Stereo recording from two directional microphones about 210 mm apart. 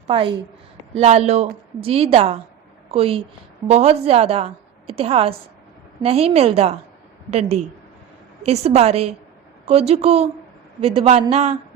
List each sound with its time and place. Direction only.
0.1 s a woman's voice: 25° right (ahead or behind)